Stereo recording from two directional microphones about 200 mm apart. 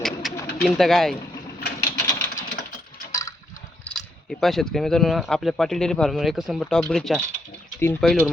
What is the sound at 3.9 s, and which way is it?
Speech, centre (ahead or behind).